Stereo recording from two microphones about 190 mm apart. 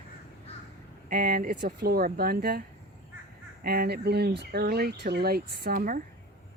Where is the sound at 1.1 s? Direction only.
50° right (ahead or behind).